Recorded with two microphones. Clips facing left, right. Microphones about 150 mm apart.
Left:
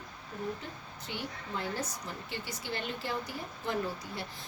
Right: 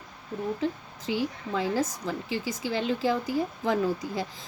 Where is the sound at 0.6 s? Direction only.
90° right.